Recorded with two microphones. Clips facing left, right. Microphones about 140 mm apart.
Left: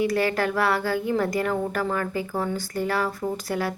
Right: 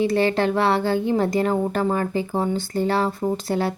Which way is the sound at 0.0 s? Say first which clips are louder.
Right 4 dB; 25° right (ahead or behind).